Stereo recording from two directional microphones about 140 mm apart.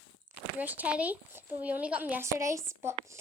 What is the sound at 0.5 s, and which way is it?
A woman's voice, 10° right (ahead or behind).